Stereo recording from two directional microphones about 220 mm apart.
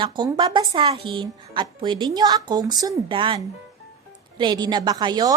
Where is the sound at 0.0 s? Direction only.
20° right (ahead or behind).